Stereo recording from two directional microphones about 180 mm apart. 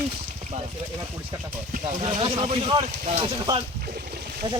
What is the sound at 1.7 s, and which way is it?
Speech, 45° right (ahead or behind).